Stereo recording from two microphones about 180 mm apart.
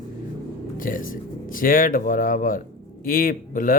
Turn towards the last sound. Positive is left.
turn(degrees=50)  # may be behind; listen again after turning